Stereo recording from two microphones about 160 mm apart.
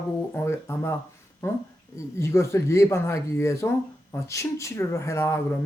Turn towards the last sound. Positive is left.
turn(degrees=15)  # may be behind; listen again after turning